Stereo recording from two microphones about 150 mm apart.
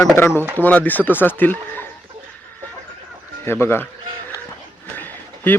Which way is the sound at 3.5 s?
15° left (ahead or behind).